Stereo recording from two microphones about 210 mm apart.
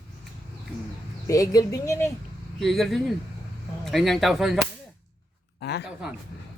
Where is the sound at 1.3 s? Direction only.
15° left (ahead or behind).